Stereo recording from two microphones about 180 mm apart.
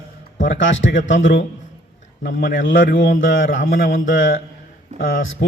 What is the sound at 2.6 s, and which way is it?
Speech, 90° left.